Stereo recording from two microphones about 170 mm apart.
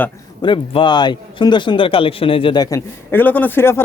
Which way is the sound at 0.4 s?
30° left (ahead or behind).